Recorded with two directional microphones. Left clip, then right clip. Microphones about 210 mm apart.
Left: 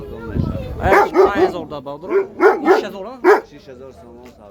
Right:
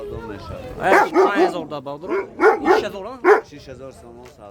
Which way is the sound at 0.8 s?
5° right (ahead or behind).